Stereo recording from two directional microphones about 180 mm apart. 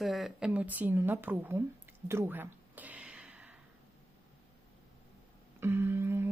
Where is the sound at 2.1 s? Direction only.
10° right (ahead or behind).